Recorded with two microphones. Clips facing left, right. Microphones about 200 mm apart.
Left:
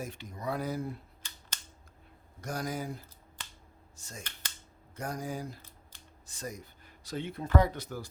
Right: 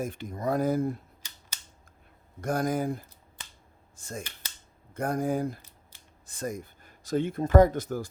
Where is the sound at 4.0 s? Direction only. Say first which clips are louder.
Right 8 dB; 55° right (ahead or behind).